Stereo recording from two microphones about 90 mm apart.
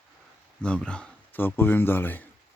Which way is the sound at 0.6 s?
10° left (ahead or behind).